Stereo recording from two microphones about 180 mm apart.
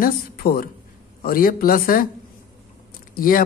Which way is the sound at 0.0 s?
55° left (ahead or behind).